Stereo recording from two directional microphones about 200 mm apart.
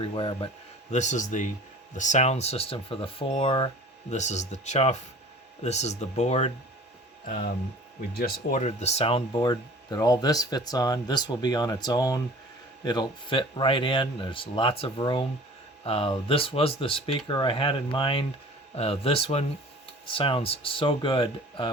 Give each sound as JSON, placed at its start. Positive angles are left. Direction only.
{"t": 0.0, "sound": "speech", "side_deg": 25}
{"t": 7.3, "sound": "speech", "side_deg": 45}